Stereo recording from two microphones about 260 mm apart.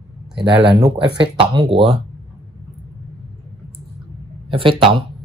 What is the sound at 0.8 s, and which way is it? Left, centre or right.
Speech, centre.